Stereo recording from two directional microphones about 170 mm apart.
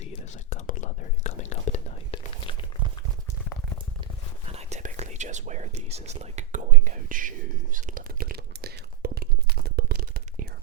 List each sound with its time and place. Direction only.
0.0 s whispering: 45° left (ahead or behind); by 2.6 s 30° left (ahead or behind)
4.5 s whispering: 40° right (ahead or behind); by 10.5 s 55° right (ahead or behind)